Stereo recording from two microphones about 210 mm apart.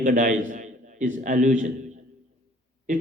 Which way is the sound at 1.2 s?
35° right (ahead or behind).